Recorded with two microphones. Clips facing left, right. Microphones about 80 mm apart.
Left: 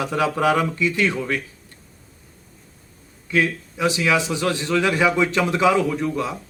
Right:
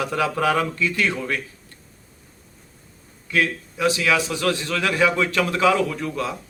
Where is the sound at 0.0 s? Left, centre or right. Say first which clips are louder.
Left 1 dB; centre.